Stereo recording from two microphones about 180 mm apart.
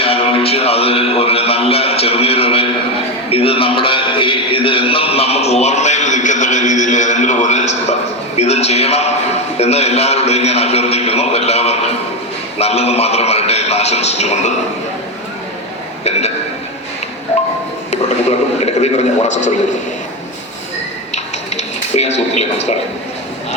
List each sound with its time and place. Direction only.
0.0 s music: 30° left (ahead or behind)
3.2 s a sound: 30° left (ahead or behind)
12.5 s a man's voice: 35° left (ahead or behind)
16.0 s a man's voice: 35° left (ahead or behind)
17.9 s a man's voice: 35° left (ahead or behind)
21.1 s television: 40° left (ahead or behind)